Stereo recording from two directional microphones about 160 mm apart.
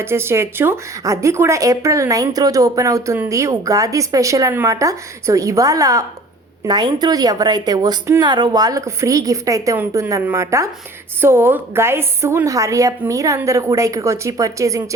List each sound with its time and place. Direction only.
0.0 s speech: 15° right (ahead or behind)